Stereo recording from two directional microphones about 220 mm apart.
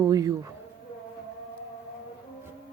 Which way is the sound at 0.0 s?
15° right (ahead or behind).